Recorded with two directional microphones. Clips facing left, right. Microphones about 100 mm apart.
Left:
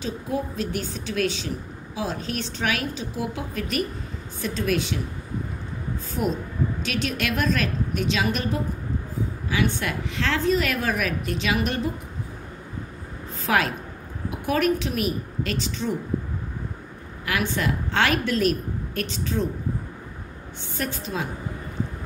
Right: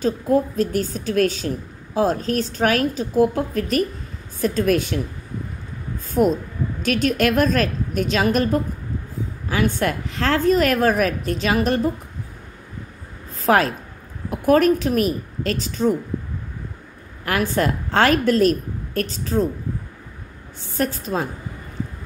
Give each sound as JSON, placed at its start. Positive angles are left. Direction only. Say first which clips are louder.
{"t": 0.0, "sound": "a woman's voice", "louder": "right 9 dB", "side_deg": -45}
{"t": 6.8, "sound": "a woman's voice", "louder": "right 8 dB", "side_deg": -45}
{"t": 13.5, "sound": "a woman's voice", "louder": "right 6 dB", "side_deg": -40}
{"t": 17.2, "sound": "a woman's voice", "louder": "right 5 dB", "side_deg": -40}
{"t": 20.7, "sound": "a woman's voice", "louder": "right 6 dB", "side_deg": -40}